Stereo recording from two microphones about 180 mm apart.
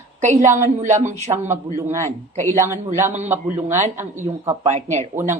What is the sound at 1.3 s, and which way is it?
Speech, 15° right (ahead or behind).